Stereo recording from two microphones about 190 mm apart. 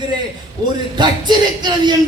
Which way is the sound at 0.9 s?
20° right (ahead or behind).